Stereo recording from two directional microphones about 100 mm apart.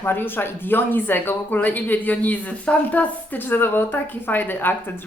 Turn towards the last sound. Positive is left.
turn(degrees=20)  # may be behind; listen again after turning